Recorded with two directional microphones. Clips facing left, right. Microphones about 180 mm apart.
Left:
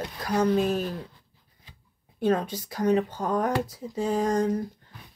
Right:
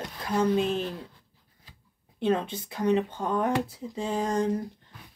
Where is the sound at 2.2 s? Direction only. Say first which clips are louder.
Left 2 dB; 25° right (ahead or behind).